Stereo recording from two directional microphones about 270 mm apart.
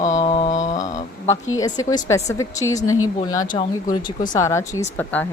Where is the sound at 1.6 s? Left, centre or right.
Centre.